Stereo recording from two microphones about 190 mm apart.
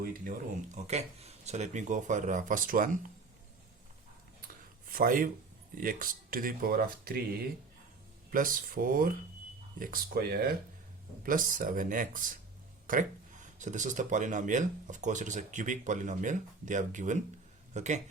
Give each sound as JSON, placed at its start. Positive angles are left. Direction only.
{"t": 0.0, "sound": "speech", "side_deg": -45}
{"t": 4.9, "sound": "speech", "side_deg": -45}
{"t": 8.3, "sound": "speech", "side_deg": -45}